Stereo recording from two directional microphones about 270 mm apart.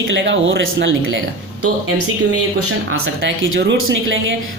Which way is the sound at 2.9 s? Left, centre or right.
Right.